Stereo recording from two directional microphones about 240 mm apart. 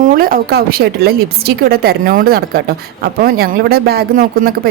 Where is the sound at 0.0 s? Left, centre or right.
Right.